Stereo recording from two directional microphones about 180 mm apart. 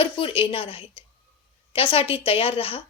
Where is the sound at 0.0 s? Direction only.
30° left (ahead or behind).